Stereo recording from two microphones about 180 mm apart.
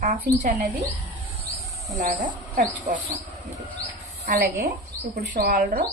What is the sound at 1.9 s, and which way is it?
Speech, 45° right (ahead or behind).